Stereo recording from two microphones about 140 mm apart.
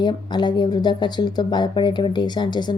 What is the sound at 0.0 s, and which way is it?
Speech, 35° left (ahead or behind).